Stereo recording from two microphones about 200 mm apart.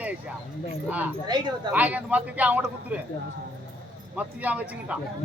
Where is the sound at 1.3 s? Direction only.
20° right (ahead or behind).